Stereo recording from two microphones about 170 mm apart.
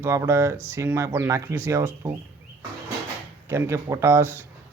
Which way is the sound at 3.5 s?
15° right (ahead or behind).